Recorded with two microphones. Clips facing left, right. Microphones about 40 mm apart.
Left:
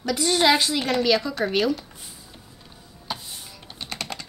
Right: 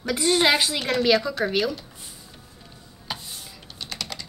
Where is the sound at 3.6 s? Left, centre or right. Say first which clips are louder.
Left 2 dB; left.